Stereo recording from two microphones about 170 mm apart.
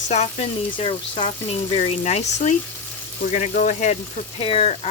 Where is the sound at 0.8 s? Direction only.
30° left (ahead or behind).